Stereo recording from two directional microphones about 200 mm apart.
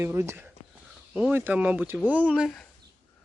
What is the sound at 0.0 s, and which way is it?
Speech, 15° right (ahead or behind).